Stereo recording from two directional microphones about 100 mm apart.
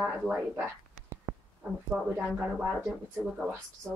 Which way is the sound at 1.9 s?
Centre (ahead or behind).